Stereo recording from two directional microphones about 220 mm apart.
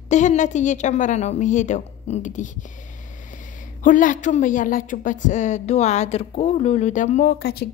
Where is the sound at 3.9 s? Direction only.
35° left (ahead or behind).